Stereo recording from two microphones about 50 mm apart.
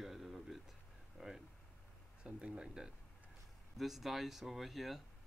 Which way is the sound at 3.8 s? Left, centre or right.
Centre.